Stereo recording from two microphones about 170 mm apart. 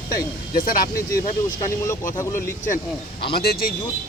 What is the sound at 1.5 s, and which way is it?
Speech, 20° left (ahead or behind).